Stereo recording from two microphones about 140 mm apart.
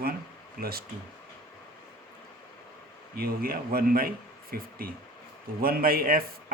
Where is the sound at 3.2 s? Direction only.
90° right.